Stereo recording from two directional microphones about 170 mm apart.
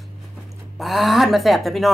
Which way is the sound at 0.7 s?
Centre (ahead or behind).